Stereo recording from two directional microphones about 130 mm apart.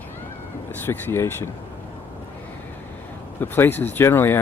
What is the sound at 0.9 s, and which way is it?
Speech, 20° left (ahead or behind).